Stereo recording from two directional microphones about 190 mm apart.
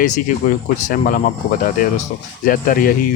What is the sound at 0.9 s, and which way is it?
Speech, 45° left (ahead or behind).